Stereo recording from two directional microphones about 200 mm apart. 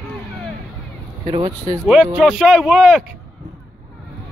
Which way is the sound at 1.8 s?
Centre (ahead or behind).